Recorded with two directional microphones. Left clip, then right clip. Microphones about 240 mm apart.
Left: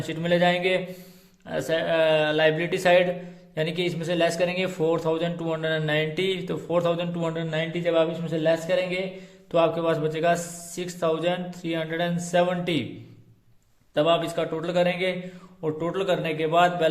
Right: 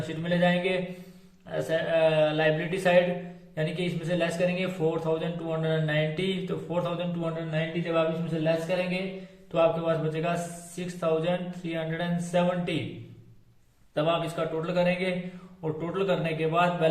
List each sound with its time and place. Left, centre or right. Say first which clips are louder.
0.1 s a man's voice: left 5 dB; left
13.9 s speech: left 5 dB; left